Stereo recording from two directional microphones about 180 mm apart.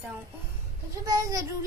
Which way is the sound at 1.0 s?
20° right (ahead or behind).